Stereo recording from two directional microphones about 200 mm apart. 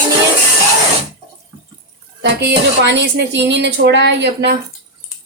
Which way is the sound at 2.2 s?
60° right (ahead or behind).